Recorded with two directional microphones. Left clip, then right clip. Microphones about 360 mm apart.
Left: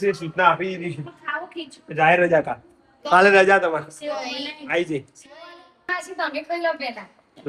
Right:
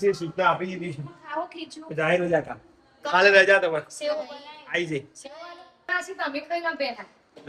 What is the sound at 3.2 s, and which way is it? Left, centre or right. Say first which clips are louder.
Speech: left 2 dB; centre.